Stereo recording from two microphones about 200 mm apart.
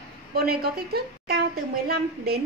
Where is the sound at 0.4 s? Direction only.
50° right (ahead or behind).